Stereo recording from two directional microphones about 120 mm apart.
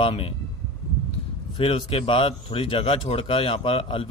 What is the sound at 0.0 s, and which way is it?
Speech, 50° left (ahead or behind).